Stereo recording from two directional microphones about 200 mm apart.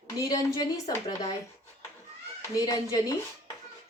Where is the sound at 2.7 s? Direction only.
20° left (ahead or behind).